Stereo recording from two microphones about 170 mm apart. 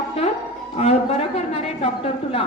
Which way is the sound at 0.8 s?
40° left (ahead or behind).